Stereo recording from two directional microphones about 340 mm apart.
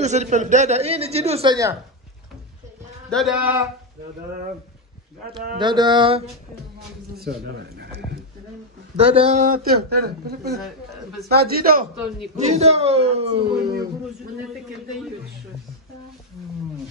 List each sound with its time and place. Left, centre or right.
0.0 s a man's voice: centre
3.1 s speech: centre
5.6 s a man's voice: centre
7.2 s a man's voice: right
8.9 s a man's voice: centre
10.6 s speech: centre
11.2 s a man's voice: right